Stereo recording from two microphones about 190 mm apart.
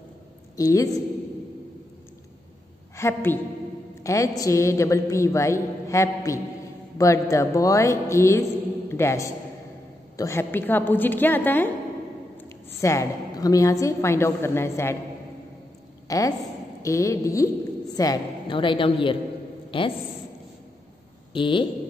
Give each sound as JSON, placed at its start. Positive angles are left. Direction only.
{"t": 0.6, "sound": "a woman's voice", "side_deg": 20}
{"t": 3.0, "sound": "a woman's voice", "side_deg": 10}
{"t": 16.1, "sound": "a woman's voice", "side_deg": 15}
{"t": 21.3, "sound": "speech", "side_deg": 25}